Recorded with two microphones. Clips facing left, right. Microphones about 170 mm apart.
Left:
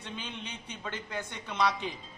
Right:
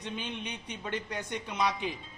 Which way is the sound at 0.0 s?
15° right (ahead or behind).